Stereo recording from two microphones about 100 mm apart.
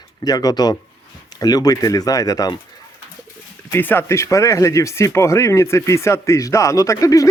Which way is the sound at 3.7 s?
20° left (ahead or behind).